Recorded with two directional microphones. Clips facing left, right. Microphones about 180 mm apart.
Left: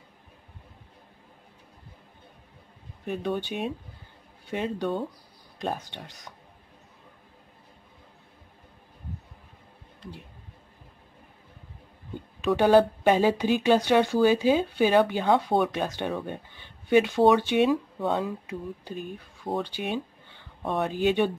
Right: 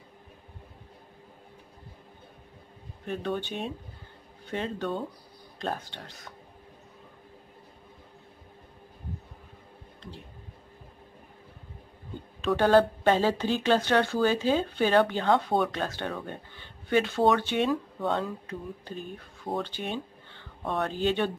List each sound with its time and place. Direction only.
3.1 s speech: 10° left (ahead or behind)
12.5 s speech: 10° left (ahead or behind)